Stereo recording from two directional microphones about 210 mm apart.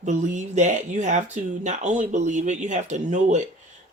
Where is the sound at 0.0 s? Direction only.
35° right (ahead or behind).